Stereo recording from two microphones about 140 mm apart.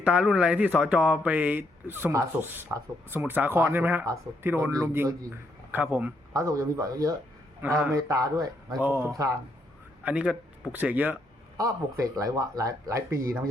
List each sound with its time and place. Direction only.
0.0 s speech: 5° right (ahead or behind)
6.3 s speech: 25° right (ahead or behind)
7.6 s speech: 10° right (ahead or behind)
7.9 s speech: 25° right (ahead or behind)
10.0 s a man's voice: 10° right (ahead or behind)
11.5 s speech: 25° right (ahead or behind)